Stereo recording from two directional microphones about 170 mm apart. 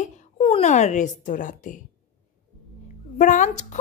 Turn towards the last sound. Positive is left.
turn(degrees=45)  # may be behind; listen again after turning